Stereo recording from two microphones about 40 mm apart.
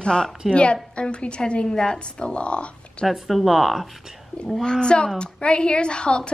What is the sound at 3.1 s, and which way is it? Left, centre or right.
Speech, centre.